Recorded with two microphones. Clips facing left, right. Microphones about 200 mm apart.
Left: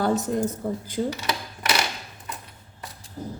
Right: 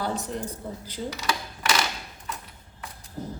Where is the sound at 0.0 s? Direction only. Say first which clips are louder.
Left 7 dB; 45° left (ahead or behind).